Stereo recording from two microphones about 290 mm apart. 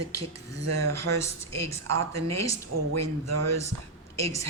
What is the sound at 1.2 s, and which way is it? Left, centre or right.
Speech, centre.